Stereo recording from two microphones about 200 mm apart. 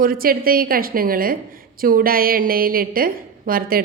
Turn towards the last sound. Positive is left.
turn(degrees=-45)  # may be behind; listen again after turning